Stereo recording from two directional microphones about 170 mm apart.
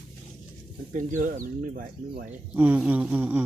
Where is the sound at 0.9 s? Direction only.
50° right (ahead or behind).